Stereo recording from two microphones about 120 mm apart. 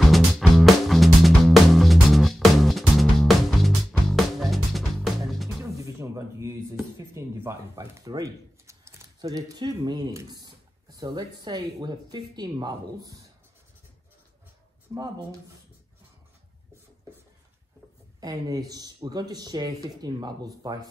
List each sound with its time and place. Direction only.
0.0 s music: centre (ahead or behind)
5.6 s music: 25° right (ahead or behind)
7.2 s speech: 20° right (ahead or behind)
14.9 s speech: 30° right (ahead or behind)
18.2 s speech: 30° right (ahead or behind)